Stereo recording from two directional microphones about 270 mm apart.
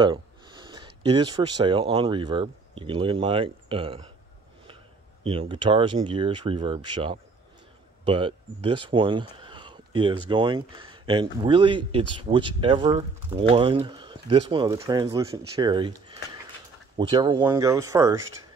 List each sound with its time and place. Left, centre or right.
0.0 s speech: centre
5.2 s speech: centre
16.9 s speech: centre